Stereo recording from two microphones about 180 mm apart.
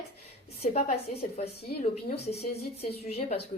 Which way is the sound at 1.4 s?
35° left (ahead or behind).